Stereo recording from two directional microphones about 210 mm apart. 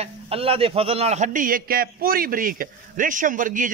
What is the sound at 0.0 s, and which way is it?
A man's voice, 25° right (ahead or behind).